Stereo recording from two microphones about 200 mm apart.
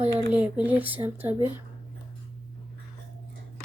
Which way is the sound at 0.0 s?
5° right (ahead or behind).